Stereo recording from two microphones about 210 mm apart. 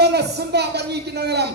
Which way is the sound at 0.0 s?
50° right (ahead or behind).